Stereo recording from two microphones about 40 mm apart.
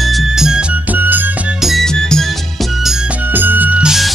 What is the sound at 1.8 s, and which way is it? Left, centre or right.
Music, centre.